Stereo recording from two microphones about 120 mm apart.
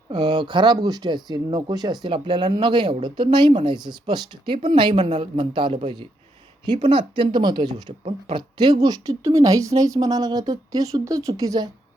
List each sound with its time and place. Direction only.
0.1 s speech: 40° right (ahead or behind)